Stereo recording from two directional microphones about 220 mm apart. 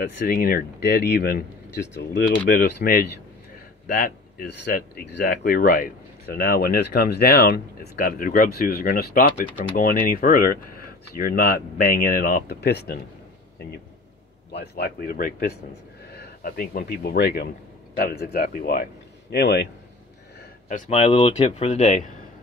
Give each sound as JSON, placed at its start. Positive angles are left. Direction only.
{"t": 0.2, "sound": "speech", "side_deg": 45}
{"t": 2.5, "sound": "speech", "side_deg": 40}
{"t": 14.5, "sound": "a man's voice", "side_deg": 50}
{"t": 20.6, "sound": "speech", "side_deg": 35}